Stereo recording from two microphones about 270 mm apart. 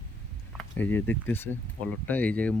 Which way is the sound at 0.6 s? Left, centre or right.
Centre.